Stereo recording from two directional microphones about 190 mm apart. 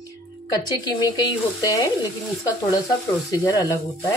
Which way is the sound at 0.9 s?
25° left (ahead or behind).